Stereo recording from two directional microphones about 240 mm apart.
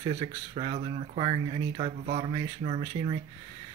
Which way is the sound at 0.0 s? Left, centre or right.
Centre.